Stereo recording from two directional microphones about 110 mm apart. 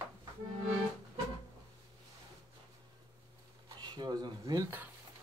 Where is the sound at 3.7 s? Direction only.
40° right (ahead or behind).